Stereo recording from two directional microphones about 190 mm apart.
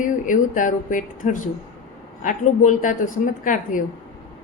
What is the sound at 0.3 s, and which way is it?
Speech, 45° left (ahead or behind).